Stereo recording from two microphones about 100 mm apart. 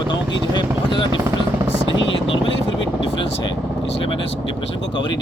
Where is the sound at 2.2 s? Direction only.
65° left (ahead or behind).